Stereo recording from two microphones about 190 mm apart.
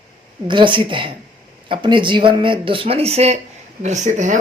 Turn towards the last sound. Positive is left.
turn(degrees=-40)  # may be behind; listen again after turning